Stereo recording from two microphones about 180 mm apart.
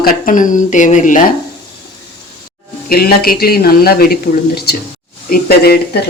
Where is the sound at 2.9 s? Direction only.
55° left (ahead or behind).